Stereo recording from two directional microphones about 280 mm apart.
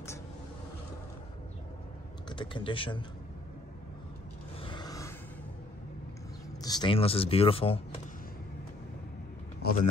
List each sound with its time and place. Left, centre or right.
2.2 s speech: centre
4.6 s a sound: centre
6.6 s speech: centre
9.6 s speech: left